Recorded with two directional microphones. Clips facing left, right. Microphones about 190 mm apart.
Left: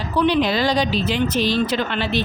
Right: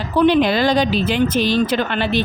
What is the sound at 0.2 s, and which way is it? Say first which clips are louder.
A woman's voice: right 4 dB; 55° right (ahead or behind).